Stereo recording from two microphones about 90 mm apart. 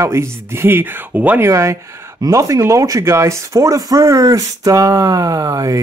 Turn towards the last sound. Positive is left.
turn(degrees=-40)  # may be behind; listen again after turning